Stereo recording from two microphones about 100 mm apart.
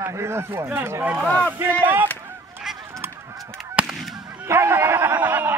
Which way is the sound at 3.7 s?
5° right (ahead or behind).